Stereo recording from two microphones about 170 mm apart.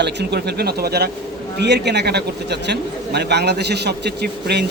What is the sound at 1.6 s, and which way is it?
A man's voice, 80° right.